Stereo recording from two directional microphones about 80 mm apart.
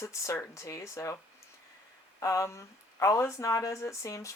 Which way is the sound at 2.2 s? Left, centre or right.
Left.